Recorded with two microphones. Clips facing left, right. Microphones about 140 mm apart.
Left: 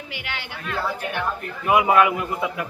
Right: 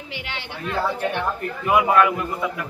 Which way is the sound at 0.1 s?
30° right (ahead or behind).